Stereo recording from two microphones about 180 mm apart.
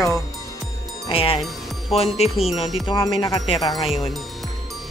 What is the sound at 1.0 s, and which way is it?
Speech, 30° left (ahead or behind).